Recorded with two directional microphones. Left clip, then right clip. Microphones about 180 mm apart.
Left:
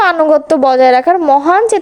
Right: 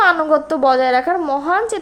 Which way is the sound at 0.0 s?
45° left (ahead or behind).